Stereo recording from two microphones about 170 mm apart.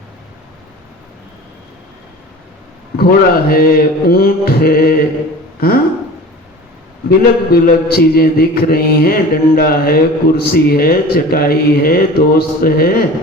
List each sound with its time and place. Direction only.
3.0 s mantra: 60° left (ahead or behind)
5.5 s speech: 60° left (ahead or behind)
7.1 s mantra: 60° left (ahead or behind)